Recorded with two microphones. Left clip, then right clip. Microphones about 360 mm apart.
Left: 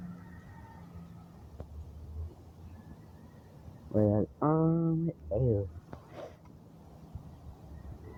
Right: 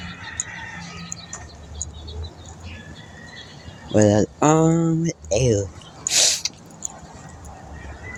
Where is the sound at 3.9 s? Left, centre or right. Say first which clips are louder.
Right 12 dB; left.